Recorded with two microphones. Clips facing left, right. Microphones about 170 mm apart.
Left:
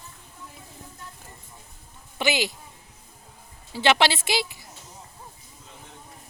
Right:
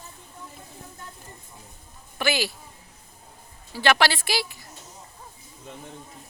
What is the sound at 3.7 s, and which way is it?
Speech, 20° left (ahead or behind).